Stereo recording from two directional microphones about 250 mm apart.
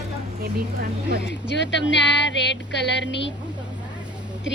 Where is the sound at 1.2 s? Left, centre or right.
Left.